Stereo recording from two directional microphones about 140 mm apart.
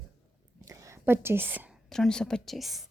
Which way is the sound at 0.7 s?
20° right (ahead or behind).